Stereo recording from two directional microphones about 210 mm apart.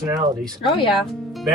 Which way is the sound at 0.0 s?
20° right (ahead or behind).